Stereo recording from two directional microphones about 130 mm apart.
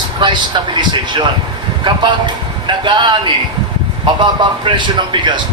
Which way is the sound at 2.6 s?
40° right (ahead or behind).